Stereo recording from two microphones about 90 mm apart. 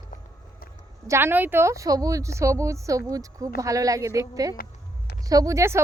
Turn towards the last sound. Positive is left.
turn(degrees=-35)  # may be behind; listen again after turning